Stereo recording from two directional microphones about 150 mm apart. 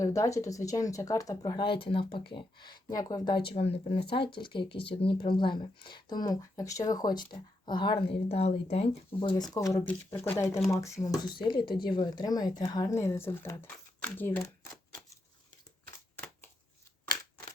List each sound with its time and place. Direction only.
0.0 s speech: 20° left (ahead or behind)
3.5 s speech: 40° left (ahead or behind)
9.4 s speech: 20° left (ahead or behind)